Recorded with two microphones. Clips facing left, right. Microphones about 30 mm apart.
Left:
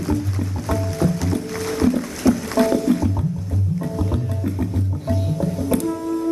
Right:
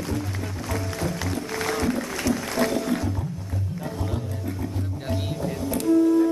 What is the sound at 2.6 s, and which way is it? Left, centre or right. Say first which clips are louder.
Music: left 5 dB; left.